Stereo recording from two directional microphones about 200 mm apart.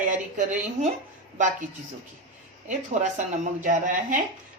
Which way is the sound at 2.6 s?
35° right (ahead or behind).